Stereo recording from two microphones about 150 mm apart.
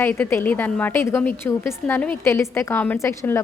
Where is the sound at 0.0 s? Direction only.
15° left (ahead or behind).